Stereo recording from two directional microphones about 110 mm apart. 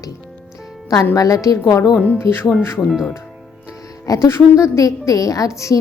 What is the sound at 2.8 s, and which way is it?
Speech, centre (ahead or behind).